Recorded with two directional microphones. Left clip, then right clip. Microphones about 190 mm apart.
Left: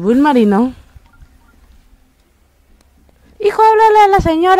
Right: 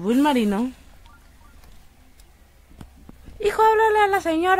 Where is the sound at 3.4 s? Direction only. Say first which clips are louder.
Left 8 dB; 30° left (ahead or behind).